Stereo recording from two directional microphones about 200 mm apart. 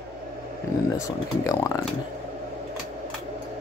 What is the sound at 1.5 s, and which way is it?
Speech, 15° left (ahead or behind).